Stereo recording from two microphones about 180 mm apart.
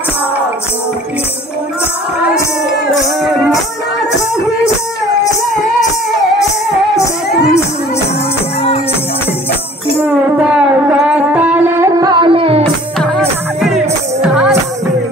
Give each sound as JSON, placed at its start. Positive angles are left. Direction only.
{"t": 10.0, "sound": "music", "side_deg": -5}
{"t": 13.6, "sound": "music", "side_deg": 0}